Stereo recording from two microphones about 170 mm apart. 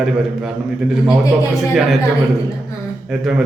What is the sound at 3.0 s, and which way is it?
Speech, 5° right (ahead or behind).